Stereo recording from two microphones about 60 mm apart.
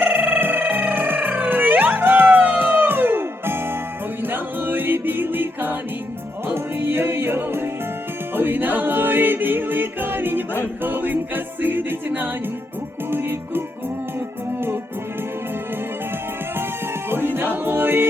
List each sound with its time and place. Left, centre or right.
0.0 s music: right
17.1 s music: right